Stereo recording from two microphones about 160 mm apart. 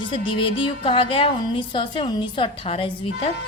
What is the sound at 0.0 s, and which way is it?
A woman's voice, 30° left (ahead or behind).